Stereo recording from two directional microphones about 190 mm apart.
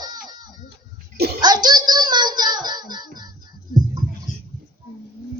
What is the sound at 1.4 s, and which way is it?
Child singing, 20° right (ahead or behind).